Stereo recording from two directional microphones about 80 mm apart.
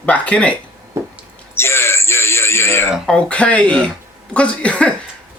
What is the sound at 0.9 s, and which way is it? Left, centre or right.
Drip, right.